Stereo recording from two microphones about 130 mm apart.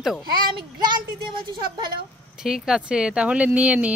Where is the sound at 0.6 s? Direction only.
35° right (ahead or behind).